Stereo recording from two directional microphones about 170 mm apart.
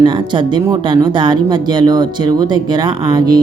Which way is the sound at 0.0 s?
25° right (ahead or behind).